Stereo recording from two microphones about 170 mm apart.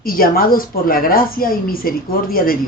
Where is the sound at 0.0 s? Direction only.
60° left (ahead or behind).